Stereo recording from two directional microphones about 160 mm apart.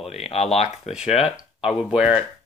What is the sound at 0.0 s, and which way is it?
Speech, 40° left (ahead or behind).